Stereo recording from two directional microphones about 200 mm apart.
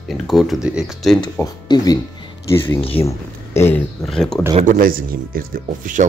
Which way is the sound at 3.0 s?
10° left (ahead or behind).